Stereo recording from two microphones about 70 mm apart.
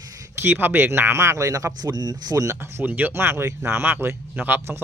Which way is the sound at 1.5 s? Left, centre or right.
Right.